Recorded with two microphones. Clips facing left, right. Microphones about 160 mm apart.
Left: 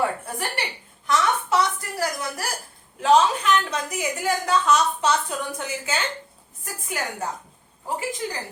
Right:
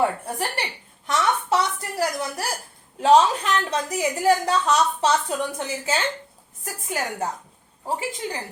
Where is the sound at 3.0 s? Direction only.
35° right (ahead or behind).